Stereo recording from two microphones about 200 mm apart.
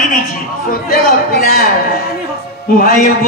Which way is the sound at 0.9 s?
50° left (ahead or behind).